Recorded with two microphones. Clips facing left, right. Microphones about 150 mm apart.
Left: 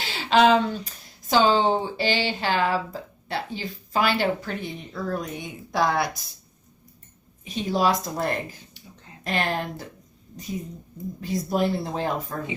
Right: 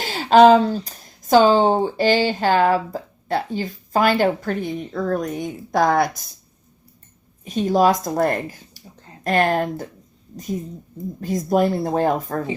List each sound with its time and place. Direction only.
0.0 s speech: 45° right (ahead or behind)
7.4 s speech: 45° right (ahead or behind)